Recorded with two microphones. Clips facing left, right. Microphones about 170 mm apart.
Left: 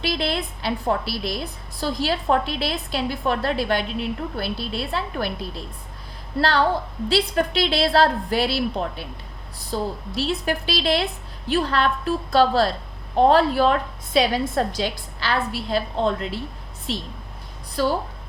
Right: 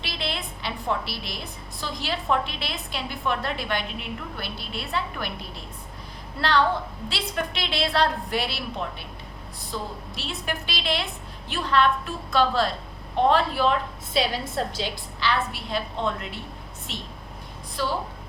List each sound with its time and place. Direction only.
0.0 s a woman's voice: 40° left (ahead or behind)
6.4 s a woman's voice: 35° left (ahead or behind)